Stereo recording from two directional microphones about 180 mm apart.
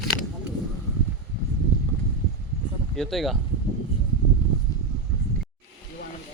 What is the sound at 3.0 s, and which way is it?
Speech, centre (ahead or behind).